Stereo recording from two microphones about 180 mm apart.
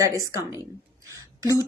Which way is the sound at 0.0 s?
15° right (ahead or behind).